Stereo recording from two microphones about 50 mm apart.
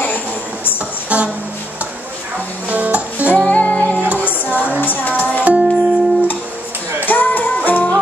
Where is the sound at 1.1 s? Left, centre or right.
Right.